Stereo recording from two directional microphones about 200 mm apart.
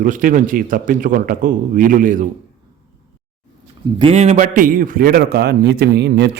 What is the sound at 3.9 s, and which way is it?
A man's voice, 30° right (ahead or behind).